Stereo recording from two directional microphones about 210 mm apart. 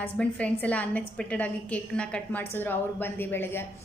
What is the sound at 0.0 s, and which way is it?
A woman's voice, 5° left (ahead or behind).